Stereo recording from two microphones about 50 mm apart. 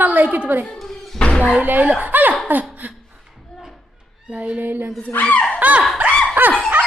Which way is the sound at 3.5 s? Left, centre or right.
Centre.